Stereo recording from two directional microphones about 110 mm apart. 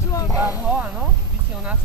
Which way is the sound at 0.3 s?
15° right (ahead or behind).